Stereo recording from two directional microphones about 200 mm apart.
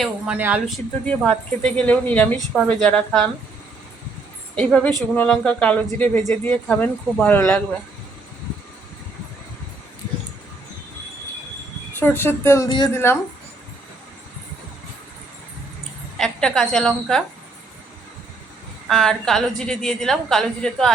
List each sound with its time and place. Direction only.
0.0 s speech: 5° right (ahead or behind)
1.0 s a woman's voice: 5° left (ahead or behind)
4.5 s a woman's voice: 5° left (ahead or behind)
11.9 s speech: 10° left (ahead or behind)
16.1 s a woman's voice: centre (ahead or behind)
18.9 s a woman's voice: 5° left (ahead or behind)